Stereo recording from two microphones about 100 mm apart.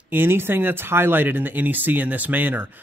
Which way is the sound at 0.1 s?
20° right (ahead or behind).